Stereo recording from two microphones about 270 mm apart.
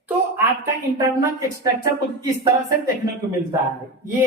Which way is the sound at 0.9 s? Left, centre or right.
Centre.